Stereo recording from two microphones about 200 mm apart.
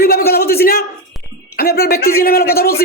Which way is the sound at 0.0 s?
50° left (ahead or behind).